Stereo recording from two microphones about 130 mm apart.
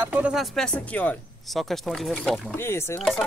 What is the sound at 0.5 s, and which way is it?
Speech, 5° left (ahead or behind).